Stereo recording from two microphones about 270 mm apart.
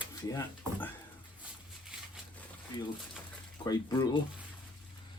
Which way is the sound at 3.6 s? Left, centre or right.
Centre.